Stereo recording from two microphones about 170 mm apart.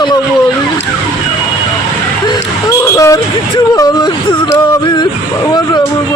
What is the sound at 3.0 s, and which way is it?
Speech, 20° left (ahead or behind).